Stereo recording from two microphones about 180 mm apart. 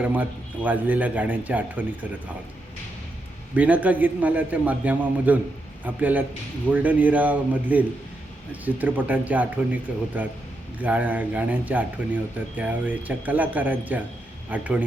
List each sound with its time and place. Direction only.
0.0 s speech: 10° right (ahead or behind)
3.5 s speech: 10° right (ahead or behind)